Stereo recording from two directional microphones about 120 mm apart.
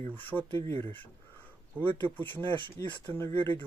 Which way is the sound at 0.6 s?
50° right (ahead or behind).